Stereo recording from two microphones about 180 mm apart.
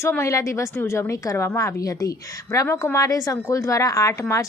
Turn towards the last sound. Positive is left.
turn(degrees=15)  # may be behind; listen again after turning